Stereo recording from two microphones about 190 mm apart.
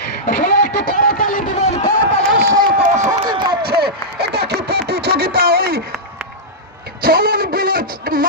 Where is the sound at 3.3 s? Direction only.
25° right (ahead or behind).